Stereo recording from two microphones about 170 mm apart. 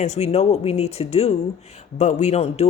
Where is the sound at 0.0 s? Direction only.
40° left (ahead or behind).